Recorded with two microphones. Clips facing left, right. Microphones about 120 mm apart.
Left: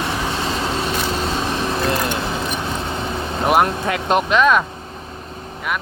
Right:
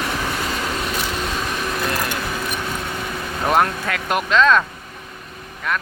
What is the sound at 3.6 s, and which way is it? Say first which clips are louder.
Speech: left 2 dB; 20° left (ahead or behind).